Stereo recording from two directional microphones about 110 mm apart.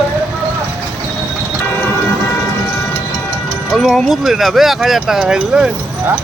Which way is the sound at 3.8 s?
Centre (ahead or behind).